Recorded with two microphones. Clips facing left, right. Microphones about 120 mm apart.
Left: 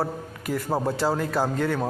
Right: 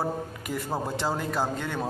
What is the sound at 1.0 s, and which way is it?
Speech, centre (ahead or behind).